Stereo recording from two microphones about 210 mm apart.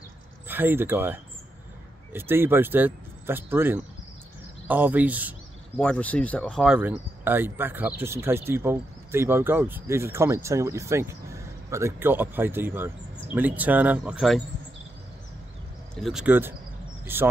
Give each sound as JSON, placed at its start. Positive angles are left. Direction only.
{"t": 0.5, "sound": "speech", "side_deg": -10}
{"t": 5.8, "sound": "speech", "side_deg": 5}
{"t": 16.0, "sound": "speech", "side_deg": 0}